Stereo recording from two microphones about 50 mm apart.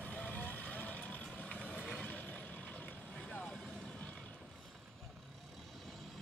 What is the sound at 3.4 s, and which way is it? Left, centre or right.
Vehicle, centre.